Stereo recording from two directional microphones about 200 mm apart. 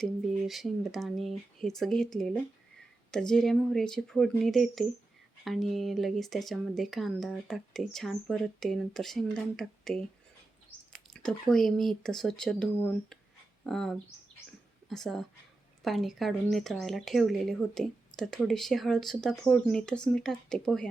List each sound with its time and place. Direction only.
0.0 s speech: centre (ahead or behind)